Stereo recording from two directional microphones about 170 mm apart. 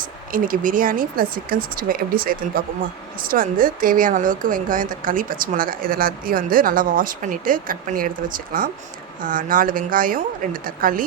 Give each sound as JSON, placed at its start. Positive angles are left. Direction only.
{"t": 0.0, "sound": "a woman's voice", "side_deg": -55}